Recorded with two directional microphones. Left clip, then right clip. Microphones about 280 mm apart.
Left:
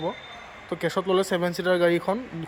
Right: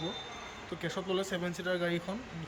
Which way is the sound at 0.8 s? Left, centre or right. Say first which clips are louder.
Left 11 dB; centre.